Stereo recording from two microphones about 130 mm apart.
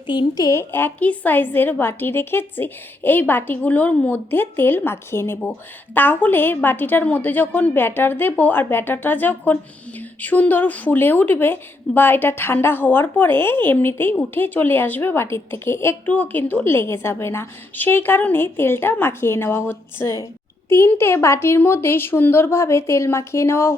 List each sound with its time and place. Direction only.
0.1 s speech: 35° left (ahead or behind)
0.7 s a woman's voice: 15° left (ahead or behind)